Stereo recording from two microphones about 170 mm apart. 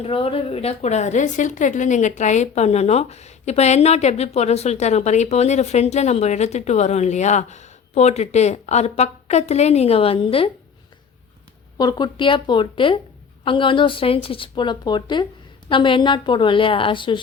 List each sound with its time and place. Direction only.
0.0 s a woman's voice: 35° left (ahead or behind)
11.8 s a woman's voice: 25° left (ahead or behind)